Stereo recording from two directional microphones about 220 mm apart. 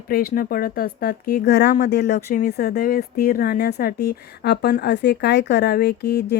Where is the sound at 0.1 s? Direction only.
45° left (ahead or behind).